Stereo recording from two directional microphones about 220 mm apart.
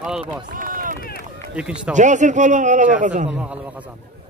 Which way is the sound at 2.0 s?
35° right (ahead or behind).